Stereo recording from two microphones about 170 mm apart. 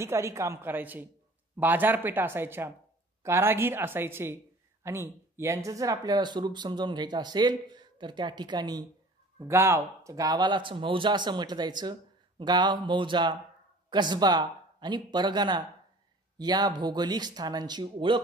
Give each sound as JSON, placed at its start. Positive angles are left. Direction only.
{"t": 0.0, "sound": "speech", "side_deg": -15}